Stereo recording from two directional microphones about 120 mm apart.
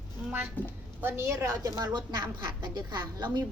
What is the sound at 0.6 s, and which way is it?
Speech, 15° left (ahead or behind).